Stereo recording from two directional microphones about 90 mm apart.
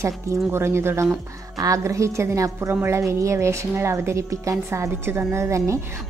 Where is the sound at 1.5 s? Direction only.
40° right (ahead or behind).